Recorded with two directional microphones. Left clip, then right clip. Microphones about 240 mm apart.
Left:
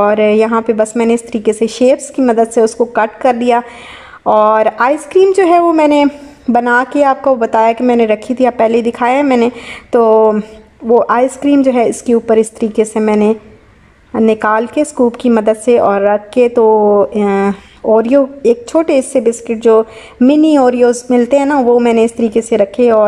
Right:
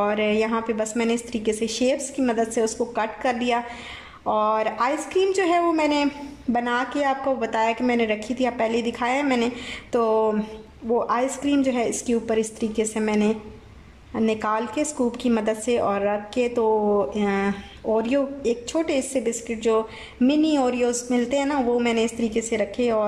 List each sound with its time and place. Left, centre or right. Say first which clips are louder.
0.0 s a woman's voice: left 13 dB; centre